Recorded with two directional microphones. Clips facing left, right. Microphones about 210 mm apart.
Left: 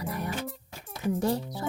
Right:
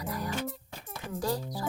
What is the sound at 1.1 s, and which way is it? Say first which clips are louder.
Speech: even; 25° left (ahead or behind).